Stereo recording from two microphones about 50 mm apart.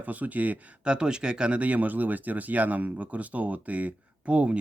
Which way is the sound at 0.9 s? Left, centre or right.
Centre.